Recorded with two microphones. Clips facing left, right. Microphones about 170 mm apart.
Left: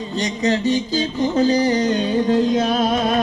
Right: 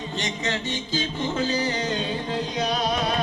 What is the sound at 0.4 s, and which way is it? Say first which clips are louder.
Music: left 11 dB; 40° left (ahead or behind).